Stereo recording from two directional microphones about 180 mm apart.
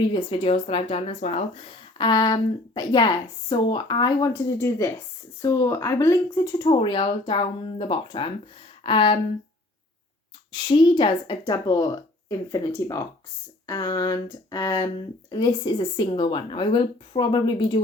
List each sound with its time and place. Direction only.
0.1 s speech: 30° left (ahead or behind)
2.0 s a woman's voice: 25° left (ahead or behind)
10.5 s a woman's voice: 25° left (ahead or behind)